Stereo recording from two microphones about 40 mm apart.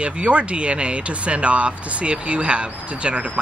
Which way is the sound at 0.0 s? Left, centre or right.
Right.